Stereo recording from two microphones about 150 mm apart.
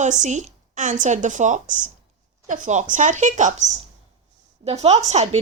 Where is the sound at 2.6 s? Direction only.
55° right (ahead or behind).